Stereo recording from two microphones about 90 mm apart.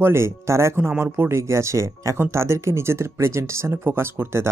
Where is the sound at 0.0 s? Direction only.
30° right (ahead or behind).